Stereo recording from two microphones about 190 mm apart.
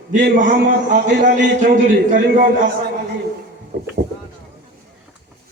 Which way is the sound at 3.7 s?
50° right (ahead or behind).